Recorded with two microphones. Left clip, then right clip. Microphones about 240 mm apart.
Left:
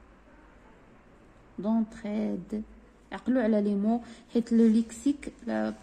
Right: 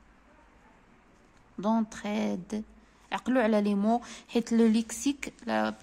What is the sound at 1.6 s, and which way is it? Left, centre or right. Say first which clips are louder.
Speech: right 2 dB; right.